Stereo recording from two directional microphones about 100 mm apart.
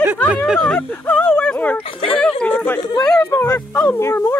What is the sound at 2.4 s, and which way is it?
Chatter, 15° left (ahead or behind).